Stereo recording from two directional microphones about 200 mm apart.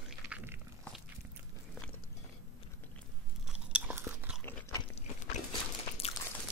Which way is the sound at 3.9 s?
10° right (ahead or behind).